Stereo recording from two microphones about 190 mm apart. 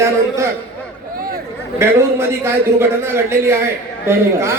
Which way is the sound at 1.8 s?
15° right (ahead or behind).